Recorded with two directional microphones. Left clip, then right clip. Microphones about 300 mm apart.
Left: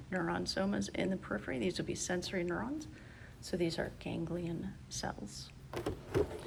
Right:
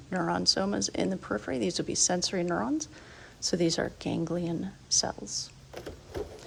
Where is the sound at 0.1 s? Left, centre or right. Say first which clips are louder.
Right 9 dB; centre.